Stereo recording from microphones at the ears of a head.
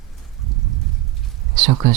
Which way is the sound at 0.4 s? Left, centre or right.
Right.